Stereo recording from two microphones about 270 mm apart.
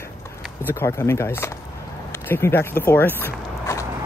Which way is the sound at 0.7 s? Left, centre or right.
Centre.